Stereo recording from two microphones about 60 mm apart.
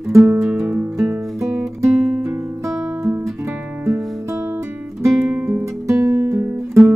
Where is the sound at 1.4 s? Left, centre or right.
Right.